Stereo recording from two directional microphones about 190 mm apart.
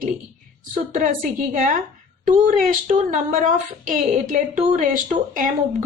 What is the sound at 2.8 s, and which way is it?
Speech, 45° right (ahead or behind).